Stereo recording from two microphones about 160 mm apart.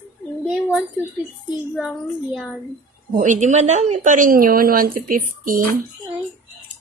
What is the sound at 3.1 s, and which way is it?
A woman's voice, 50° right (ahead or behind).